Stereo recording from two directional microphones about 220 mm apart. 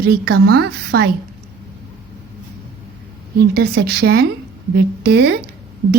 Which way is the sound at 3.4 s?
45° right (ahead or behind).